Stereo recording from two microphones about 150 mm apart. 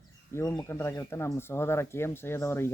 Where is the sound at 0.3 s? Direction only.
20° left (ahead or behind).